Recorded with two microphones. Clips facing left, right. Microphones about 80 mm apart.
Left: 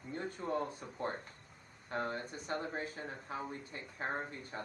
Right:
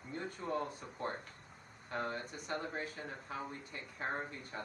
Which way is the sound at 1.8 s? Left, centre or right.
Left.